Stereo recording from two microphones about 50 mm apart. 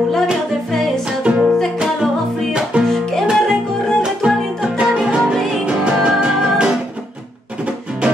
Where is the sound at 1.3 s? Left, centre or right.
Centre.